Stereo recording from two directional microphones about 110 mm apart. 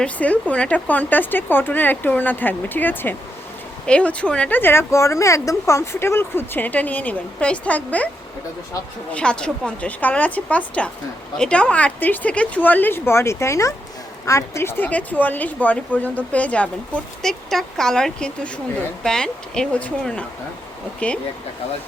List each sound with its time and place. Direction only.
0.0 s speech: 15° left (ahead or behind)
9.1 s speech: 10° left (ahead or behind)